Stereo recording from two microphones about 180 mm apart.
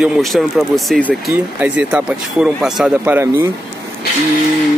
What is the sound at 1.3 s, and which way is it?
Speech, 10° right (ahead or behind).